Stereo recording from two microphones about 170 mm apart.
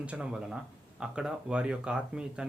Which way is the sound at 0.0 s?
5° right (ahead or behind).